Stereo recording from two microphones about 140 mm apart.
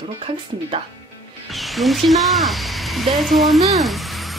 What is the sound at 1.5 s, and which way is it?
Speech, centre (ahead or behind).